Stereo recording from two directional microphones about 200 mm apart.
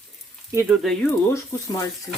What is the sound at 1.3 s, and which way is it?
Speech, 15° left (ahead or behind).